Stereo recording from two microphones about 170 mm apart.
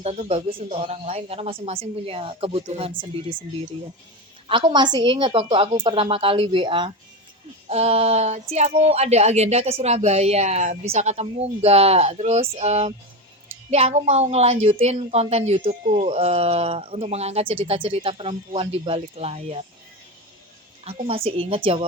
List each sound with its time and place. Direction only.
0.0 s speech: 35° right (ahead or behind)
20.8 s speech: 35° right (ahead or behind)